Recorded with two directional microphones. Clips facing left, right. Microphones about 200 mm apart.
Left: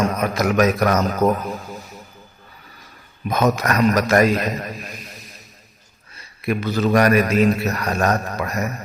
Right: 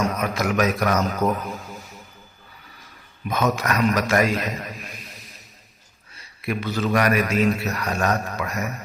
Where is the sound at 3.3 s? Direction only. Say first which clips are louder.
Left 4 dB; 40° left (ahead or behind).